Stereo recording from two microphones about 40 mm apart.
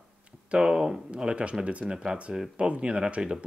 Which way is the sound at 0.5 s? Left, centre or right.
Centre.